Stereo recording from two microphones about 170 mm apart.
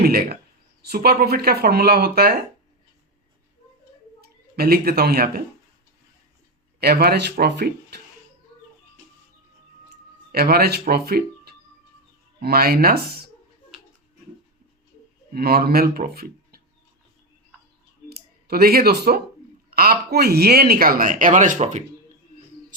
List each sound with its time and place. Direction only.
0.0 s speech: 65° right (ahead or behind)
4.2 s speech: 65° right (ahead or behind)
6.7 s speech: 65° right (ahead or behind)
10.3 s speech: 65° right (ahead or behind)
15.3 s speech: 65° right (ahead or behind)
18.1 s speech: 65° right (ahead or behind); by 21.8 s 45° right (ahead or behind)
22.3 s a sound: 45° right (ahead or behind)